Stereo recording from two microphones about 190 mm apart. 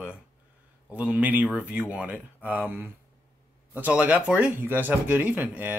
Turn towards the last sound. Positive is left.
turn(degrees=-10)  # may be behind; listen again after turning